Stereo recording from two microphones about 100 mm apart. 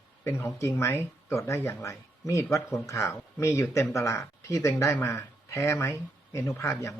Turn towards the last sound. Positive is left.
turn(degrees=30)  # may be behind; listen again after turning